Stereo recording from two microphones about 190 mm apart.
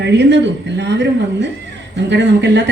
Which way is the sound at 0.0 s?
65° right (ahead or behind).